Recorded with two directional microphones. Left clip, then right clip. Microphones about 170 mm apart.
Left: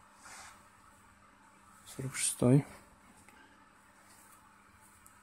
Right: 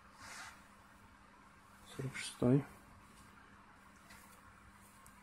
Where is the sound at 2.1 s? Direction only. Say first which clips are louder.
Left 5 dB; 50° left (ahead or behind).